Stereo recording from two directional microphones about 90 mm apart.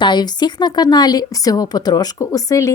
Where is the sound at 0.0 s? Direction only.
55° left (ahead or behind).